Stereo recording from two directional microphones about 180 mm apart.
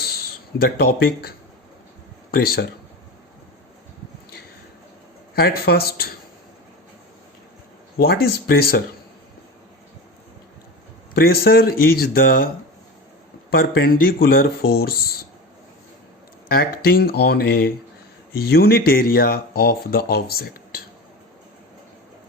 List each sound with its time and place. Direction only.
0.0 s a sound: 60° left (ahead or behind)
2.3 s speech: 55° left (ahead or behind)
5.3 s speech: 60° left (ahead or behind)
8.0 s speech: 60° left (ahead or behind)
11.1 s speech: 60° left (ahead or behind)
13.6 s speech: 55° left (ahead or behind)
16.5 s speech: 55° left (ahead or behind)